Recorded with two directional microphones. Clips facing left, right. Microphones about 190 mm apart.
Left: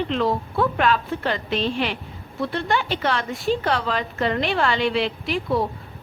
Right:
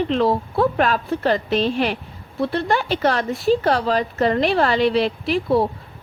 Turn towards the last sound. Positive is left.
turn(degrees=-35)  # may be behind; listen again after turning